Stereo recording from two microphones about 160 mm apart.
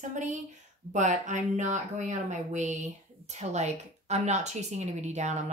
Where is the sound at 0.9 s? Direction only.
50° right (ahead or behind).